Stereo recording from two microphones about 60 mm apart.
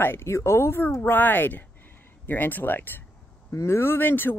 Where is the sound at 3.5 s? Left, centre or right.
Left.